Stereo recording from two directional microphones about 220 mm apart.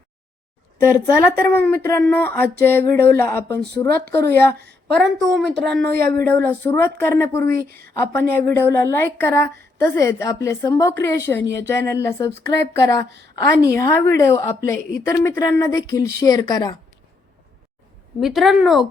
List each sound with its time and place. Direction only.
0.8 s a woman's voice: 15° left (ahead or behind)
5.9 s speech: 45° right (ahead or behind)
6.2 s a woman's voice: 10° left (ahead or behind)
18.2 s speech: centre (ahead or behind)